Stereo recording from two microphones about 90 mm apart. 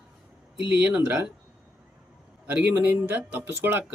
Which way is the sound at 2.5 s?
20° right (ahead or behind).